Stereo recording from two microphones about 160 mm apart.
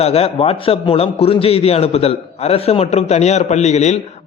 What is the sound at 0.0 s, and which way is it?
A man's voice, 40° left (ahead or behind).